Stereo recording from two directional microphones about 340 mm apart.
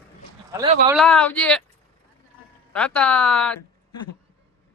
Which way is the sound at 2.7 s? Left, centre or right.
Centre.